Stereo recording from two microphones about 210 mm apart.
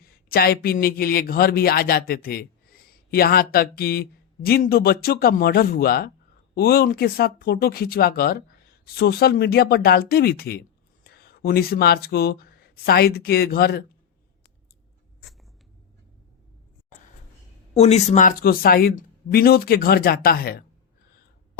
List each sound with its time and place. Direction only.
0.3 s speech: 45° left (ahead or behind)
17.7 s speech: 30° left (ahead or behind)